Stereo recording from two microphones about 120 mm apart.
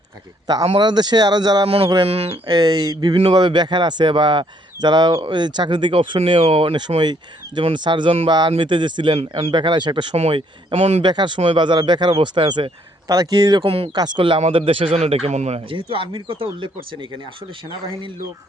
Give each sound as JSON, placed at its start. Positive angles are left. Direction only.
{"t": 0.8, "sound": "speech", "side_deg": -35}
{"t": 1.6, "sound": "a man's voice", "side_deg": -50}
{"t": 2.5, "sound": "a man's voice", "side_deg": -35}
{"t": 9.1, "sound": "a man's voice", "side_deg": -50}
{"t": 9.5, "sound": "speech", "side_deg": -40}
{"t": 10.3, "sound": "speech", "side_deg": -55}
{"t": 11.0, "sound": "speech", "side_deg": -40}
{"t": 13.7, "sound": "a man's voice", "side_deg": -55}
{"t": 13.9, "sound": "a man's voice", "side_deg": -40}